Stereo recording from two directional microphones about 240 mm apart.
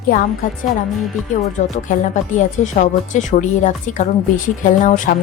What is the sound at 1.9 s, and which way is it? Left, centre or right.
A woman's voice, left.